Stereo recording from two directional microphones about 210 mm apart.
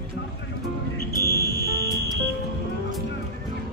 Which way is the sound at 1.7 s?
15° right (ahead or behind).